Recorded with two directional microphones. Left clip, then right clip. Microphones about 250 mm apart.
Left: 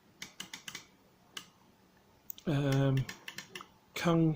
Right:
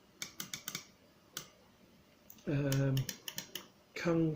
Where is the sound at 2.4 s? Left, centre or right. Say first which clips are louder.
Left 3 dB; left.